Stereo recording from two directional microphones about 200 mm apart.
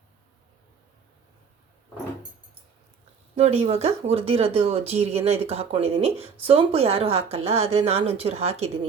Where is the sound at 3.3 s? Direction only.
30° right (ahead or behind).